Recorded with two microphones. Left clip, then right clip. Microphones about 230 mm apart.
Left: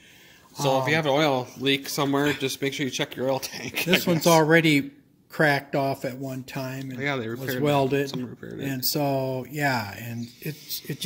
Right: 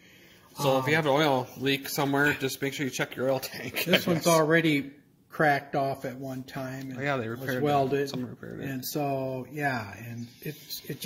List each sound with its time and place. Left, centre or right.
0.6 s speech: centre
4.2 s speech: left
7.0 s speech: centre
7.6 s speech: left
8.0 s speech: centre
8.6 s speech: left